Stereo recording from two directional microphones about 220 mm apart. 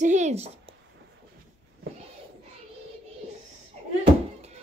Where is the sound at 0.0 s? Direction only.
35° right (ahead or behind).